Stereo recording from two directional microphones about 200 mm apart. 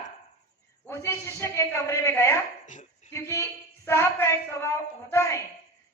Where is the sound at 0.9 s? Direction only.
10° left (ahead or behind).